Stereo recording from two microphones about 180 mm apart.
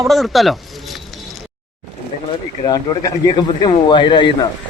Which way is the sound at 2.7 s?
25° left (ahead or behind).